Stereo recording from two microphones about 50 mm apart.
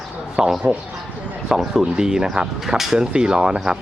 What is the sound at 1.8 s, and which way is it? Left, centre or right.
Speech, centre.